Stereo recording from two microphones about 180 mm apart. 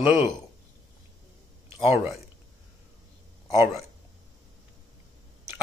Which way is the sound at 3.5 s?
15° right (ahead or behind).